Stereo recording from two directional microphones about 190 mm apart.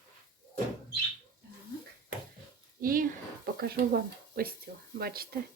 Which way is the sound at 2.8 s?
50° right (ahead or behind).